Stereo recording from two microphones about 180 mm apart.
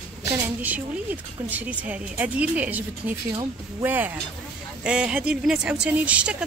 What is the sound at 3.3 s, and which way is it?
Speech, 25° right (ahead or behind).